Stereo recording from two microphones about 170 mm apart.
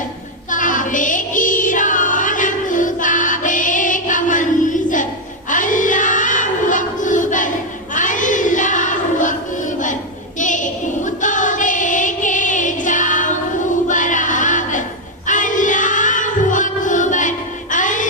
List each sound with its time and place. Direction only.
0.5 s music: 50° left (ahead or behind)
5.5 s child singing: 50° left (ahead or behind)
7.9 s a sound: 50° left (ahead or behind)
10.4 s female singing: 50° left (ahead or behind)
13.8 s music: 50° left (ahead or behind)
15.3 s a sound: 50° left (ahead or behind)